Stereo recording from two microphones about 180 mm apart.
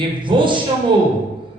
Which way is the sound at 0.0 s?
25° right (ahead or behind).